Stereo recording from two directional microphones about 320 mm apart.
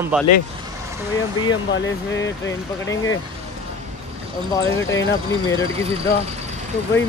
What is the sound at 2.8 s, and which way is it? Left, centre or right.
Speech, centre.